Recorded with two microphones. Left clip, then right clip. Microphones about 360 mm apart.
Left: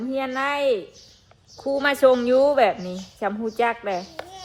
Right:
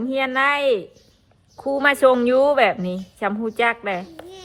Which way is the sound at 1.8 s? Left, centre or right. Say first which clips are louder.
Right 2 dB; centre.